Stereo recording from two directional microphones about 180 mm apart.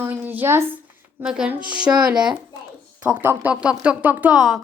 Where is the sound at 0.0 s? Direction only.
10° right (ahead or behind).